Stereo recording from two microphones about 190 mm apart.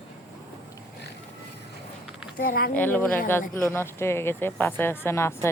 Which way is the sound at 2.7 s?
10° left (ahead or behind).